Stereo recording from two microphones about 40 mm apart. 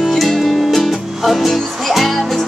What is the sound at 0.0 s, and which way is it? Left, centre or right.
Music, centre.